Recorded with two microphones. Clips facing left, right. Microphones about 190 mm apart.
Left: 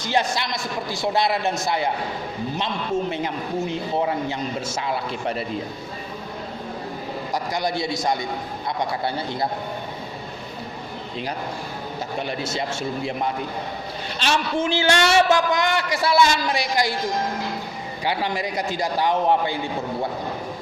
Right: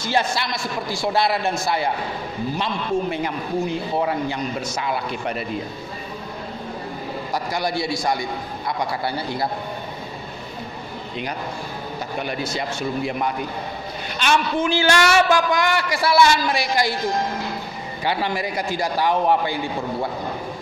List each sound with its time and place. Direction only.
0.0 s a man's voice: 15° left (ahead or behind)
7.3 s a man's voice: 20° left (ahead or behind)
12.2 s a man's voice: 25° left (ahead or behind)
18.0 s a man's voice: 20° left (ahead or behind)